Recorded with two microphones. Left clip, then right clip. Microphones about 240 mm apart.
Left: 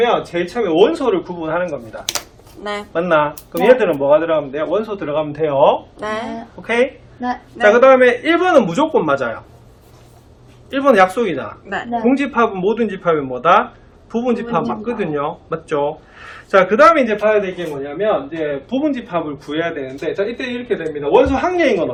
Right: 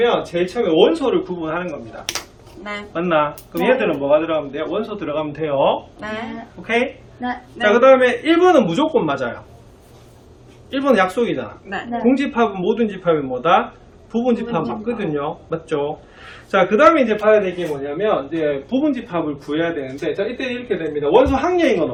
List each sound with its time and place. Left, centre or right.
0.0 s speech: centre
10.7 s a man's voice: centre